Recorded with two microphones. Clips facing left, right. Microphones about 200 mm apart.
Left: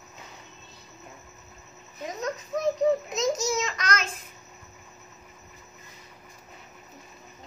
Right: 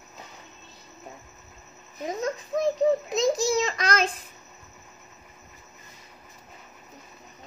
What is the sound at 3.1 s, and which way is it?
A child's voice, 30° right (ahead or behind).